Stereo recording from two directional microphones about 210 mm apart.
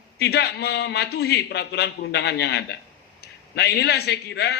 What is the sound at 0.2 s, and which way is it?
A man's voice, 50° left (ahead or behind).